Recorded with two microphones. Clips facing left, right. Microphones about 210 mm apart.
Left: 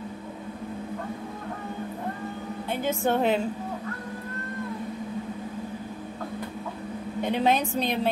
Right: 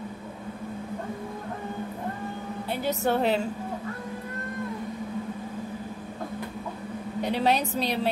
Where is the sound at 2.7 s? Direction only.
40° right (ahead or behind).